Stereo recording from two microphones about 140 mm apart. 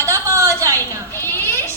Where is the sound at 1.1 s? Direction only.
15° left (ahead or behind).